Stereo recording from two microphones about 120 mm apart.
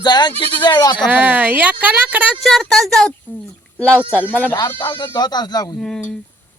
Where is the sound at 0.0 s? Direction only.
35° left (ahead or behind).